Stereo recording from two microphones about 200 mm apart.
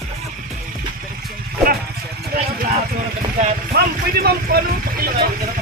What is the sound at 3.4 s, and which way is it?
Vehicle, 50° right (ahead or behind).